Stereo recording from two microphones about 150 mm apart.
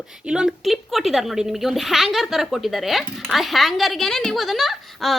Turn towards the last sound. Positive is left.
turn(degrees=0)  # may be behind; listen again after turning